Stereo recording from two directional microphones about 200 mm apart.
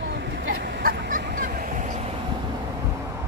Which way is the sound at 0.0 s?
65° right (ahead or behind).